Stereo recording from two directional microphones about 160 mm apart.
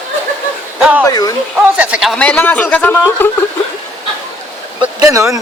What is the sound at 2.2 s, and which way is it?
Speech, 10° left (ahead or behind).